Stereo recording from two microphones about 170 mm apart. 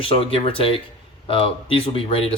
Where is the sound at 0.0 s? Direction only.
30° left (ahead or behind).